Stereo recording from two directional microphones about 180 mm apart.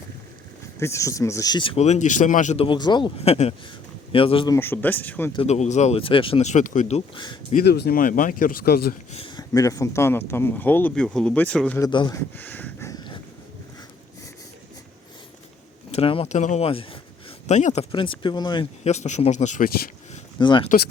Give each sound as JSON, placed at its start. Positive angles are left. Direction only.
{"t": 0.8, "sound": "speech", "side_deg": 15}
{"t": 2.6, "sound": "speech", "side_deg": 25}
{"t": 4.5, "sound": "speech", "side_deg": 10}
{"t": 5.3, "sound": "speech", "side_deg": 35}
{"t": 7.5, "sound": "speech", "side_deg": 65}
{"t": 9.1, "sound": "speech", "side_deg": 25}
{"t": 11.8, "sound": "speech", "side_deg": 25}
{"t": 12.4, "sound": "a sound", "side_deg": 10}
{"t": 15.9, "sound": "speech", "side_deg": 30}
{"t": 17.9, "sound": "speech", "side_deg": 30}
{"t": 18.9, "sound": "speech", "side_deg": 40}
{"t": 20.4, "sound": "speech", "side_deg": 25}